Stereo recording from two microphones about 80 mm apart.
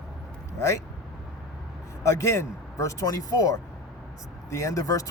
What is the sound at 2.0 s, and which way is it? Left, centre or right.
Speech, left.